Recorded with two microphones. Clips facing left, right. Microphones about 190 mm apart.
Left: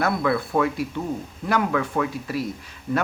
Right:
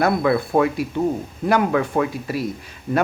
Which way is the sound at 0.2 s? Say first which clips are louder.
Right 4 dB; 30° right (ahead or behind).